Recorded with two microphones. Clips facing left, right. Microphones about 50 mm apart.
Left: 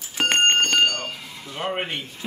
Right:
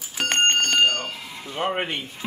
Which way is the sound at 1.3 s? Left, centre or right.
Centre.